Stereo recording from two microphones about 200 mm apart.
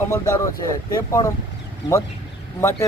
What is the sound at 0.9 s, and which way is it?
Speech, 15° left (ahead or behind).